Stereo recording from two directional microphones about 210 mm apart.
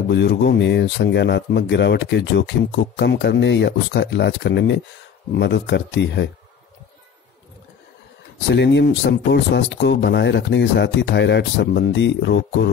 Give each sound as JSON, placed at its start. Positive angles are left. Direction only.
{"t": 0.1, "sound": "speech", "side_deg": 55}
{"t": 8.5, "sound": "speech", "side_deg": 55}